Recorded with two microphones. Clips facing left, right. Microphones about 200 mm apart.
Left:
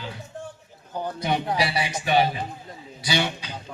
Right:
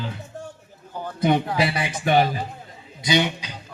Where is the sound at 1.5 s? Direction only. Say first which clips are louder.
Right 2 dB; 50° right (ahead or behind).